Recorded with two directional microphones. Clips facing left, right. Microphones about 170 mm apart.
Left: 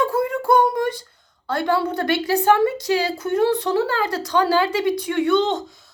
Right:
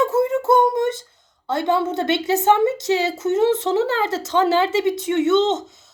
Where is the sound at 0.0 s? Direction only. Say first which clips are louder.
Right 3 dB; 25° right (ahead or behind).